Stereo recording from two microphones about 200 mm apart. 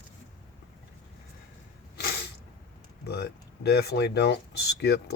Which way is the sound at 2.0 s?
55° left (ahead or behind).